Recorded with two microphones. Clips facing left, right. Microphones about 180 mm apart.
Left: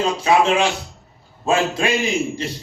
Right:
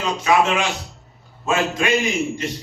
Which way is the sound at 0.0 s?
30° left (ahead or behind).